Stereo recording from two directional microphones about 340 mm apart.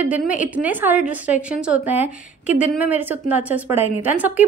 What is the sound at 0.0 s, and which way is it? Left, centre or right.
A woman's voice, centre.